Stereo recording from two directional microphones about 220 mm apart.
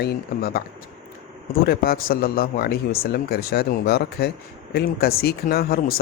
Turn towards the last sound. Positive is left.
turn(degrees=45)  # may be behind; listen again after turning